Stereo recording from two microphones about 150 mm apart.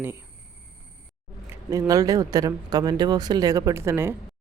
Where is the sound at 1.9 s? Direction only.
25° right (ahead or behind).